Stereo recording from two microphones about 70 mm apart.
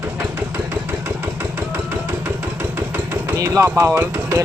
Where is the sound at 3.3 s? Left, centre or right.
Right.